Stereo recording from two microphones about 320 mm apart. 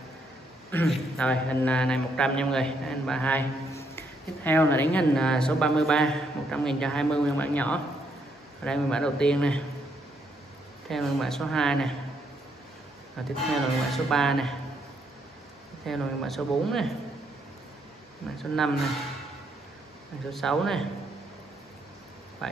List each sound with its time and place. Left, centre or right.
0.7 s a man's voice: centre
10.9 s a man's voice: centre
13.5 s a man's voice: centre
15.8 s a man's voice: centre
20.2 s a man's voice: centre
22.4 s speech: centre